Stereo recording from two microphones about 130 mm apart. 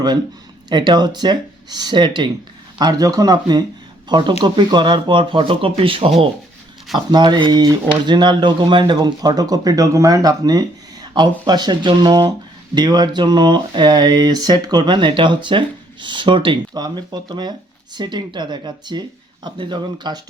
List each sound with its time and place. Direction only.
0.7 s speech: 35° right (ahead or behind)
7.1 s speech: 35° right (ahead or behind)